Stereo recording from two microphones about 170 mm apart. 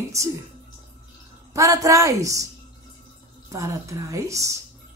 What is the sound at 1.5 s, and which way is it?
Speech, 20° right (ahead or behind).